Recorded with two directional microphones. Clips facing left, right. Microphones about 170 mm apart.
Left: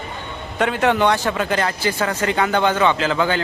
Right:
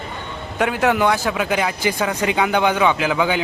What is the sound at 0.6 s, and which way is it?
A man's voice, 5° right (ahead or behind).